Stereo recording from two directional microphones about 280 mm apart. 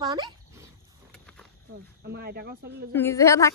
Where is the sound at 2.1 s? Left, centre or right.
Right.